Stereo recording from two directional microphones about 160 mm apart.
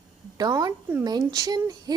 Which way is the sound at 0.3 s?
25° right (ahead or behind).